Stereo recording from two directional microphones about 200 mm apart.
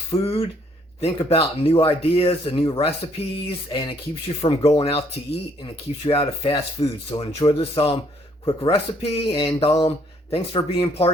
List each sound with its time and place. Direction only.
0.1 s speech: 30° left (ahead or behind)